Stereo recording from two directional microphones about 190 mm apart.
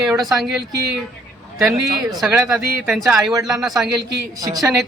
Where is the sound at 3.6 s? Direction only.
Centre (ahead or behind).